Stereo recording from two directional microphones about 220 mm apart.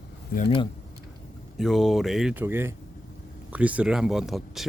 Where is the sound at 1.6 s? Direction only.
Centre (ahead or behind).